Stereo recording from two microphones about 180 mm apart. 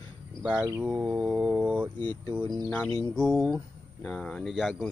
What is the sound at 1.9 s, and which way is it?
Speech, 10° left (ahead or behind).